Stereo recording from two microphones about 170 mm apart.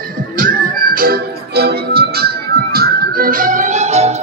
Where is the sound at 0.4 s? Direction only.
55° right (ahead or behind).